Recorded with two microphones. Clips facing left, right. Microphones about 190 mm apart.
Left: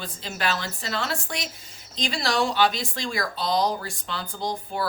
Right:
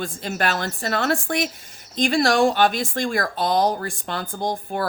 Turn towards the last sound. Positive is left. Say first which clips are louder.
# right 4 dB
turn(degrees=-50)  # may be behind; listen again after turning